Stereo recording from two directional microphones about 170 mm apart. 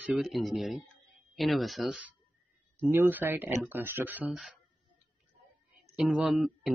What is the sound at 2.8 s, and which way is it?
Speech, 10° right (ahead or behind).